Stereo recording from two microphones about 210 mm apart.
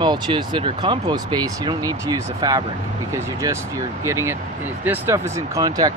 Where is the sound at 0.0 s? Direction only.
20° right (ahead or behind).